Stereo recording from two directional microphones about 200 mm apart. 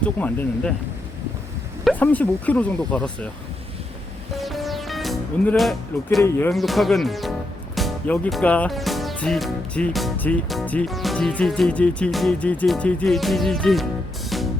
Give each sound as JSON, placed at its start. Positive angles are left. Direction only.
{"t": 0.0, "sound": "speech", "side_deg": 5}
{"t": 2.0, "sound": "speech", "side_deg": 10}
{"t": 4.4, "sound": "music", "side_deg": 0}
{"t": 6.5, "sound": "speech", "side_deg": 0}
{"t": 14.3, "sound": "music", "side_deg": 0}